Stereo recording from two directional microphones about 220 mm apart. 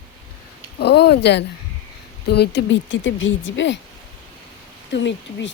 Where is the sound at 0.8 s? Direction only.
50° left (ahead or behind).